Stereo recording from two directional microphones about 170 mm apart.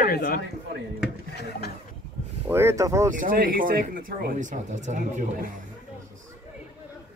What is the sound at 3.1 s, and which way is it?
Speech, 55° right (ahead or behind).